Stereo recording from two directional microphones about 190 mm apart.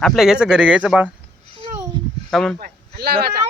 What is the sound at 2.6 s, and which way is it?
Speech, 55° right (ahead or behind).